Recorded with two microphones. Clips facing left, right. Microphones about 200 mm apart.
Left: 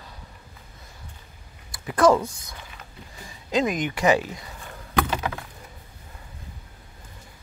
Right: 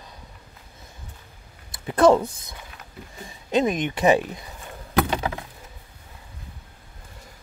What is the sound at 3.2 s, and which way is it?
Speech, 25° right (ahead or behind).